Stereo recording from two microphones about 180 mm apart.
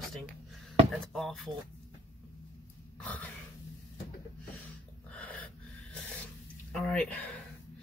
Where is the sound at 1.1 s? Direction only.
Centre (ahead or behind).